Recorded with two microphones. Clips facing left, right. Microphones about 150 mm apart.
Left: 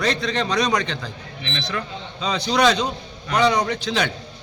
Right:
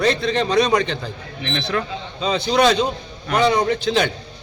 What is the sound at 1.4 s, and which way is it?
Speech, 50° right (ahead or behind).